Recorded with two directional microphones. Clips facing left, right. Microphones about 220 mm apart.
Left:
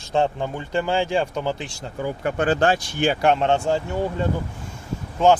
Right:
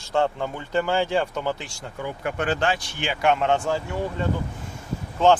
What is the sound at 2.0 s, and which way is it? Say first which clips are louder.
Speech: left 4 dB; 40° left (ahead or behind).